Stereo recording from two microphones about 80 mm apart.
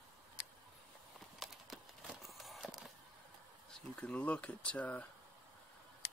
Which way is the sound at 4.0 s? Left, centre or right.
Centre.